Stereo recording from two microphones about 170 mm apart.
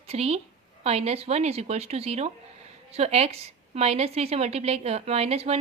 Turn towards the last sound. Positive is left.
turn(degrees=-35)  # may be behind; listen again after turning